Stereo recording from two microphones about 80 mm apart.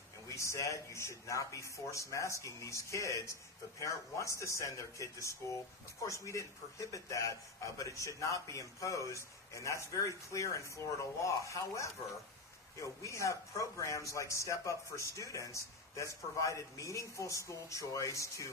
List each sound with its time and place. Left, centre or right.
0.3 s speech: left